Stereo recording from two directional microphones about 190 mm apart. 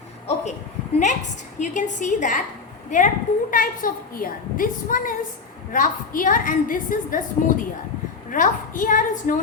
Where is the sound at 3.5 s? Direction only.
45° left (ahead or behind).